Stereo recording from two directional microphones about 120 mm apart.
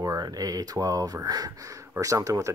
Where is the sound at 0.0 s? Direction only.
30° right (ahead or behind).